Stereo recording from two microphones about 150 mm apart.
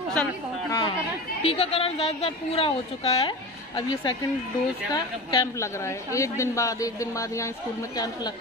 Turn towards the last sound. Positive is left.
turn(degrees=20)  # may be behind; listen again after turning